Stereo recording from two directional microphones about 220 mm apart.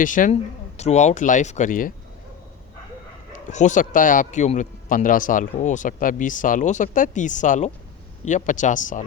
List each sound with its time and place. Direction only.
0.0 s a man's voice: 35° left (ahead or behind)
3.3 s a man's voice: 35° left (ahead or behind)